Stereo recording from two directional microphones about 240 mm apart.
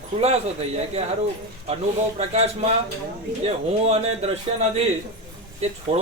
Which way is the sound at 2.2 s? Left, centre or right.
Right.